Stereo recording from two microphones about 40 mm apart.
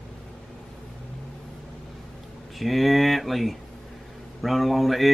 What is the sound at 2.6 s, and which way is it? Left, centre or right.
Speech, centre.